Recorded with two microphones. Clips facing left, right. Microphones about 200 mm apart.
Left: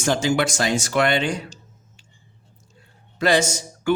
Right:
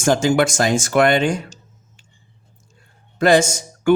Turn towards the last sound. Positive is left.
turn(degrees=-50)  # may be behind; listen again after turning